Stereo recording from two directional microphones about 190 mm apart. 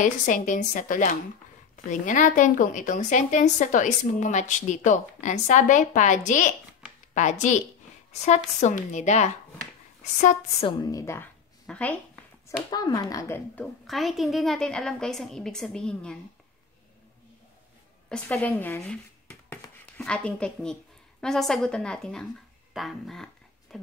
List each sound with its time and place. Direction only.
0.0 s a woman's voice: 40° left (ahead or behind)
10.8 s a woman's voice: 20° left (ahead or behind)
12.4 s speech: 20° left (ahead or behind)
13.8 s a woman's voice: centre (ahead or behind)
18.1 s a woman's voice: 5° left (ahead or behind)